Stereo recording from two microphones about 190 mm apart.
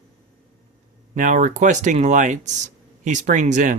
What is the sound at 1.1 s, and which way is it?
Speech, 40° right (ahead or behind).